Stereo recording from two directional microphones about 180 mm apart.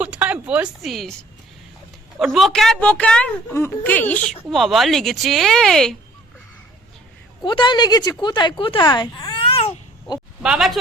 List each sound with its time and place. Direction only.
0.0 s a sound: 10° right (ahead or behind)
2.1 s a woman's voice: centre (ahead or behind)
7.4 s a woman's voice: 25° left (ahead or behind)
8.2 s babbling: 25° left (ahead or behind)
10.4 s a woman's voice: 5° right (ahead or behind)